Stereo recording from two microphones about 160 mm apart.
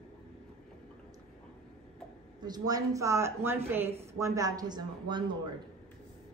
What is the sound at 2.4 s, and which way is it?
A woman's voice, 25° right (ahead or behind).